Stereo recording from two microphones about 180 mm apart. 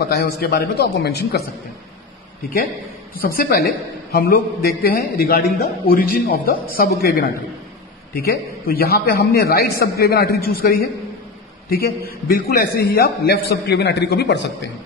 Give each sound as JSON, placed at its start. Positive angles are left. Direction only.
{"t": 0.0, "sound": "a man's voice", "side_deg": 60}
{"t": 3.2, "sound": "a man's voice", "side_deg": 55}